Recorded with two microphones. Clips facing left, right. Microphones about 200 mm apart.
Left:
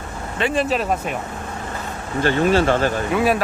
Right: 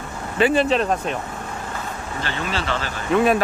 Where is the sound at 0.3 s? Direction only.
Centre (ahead or behind).